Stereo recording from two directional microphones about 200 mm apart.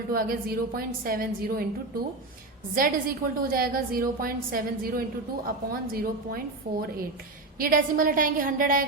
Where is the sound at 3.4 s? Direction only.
45° right (ahead or behind).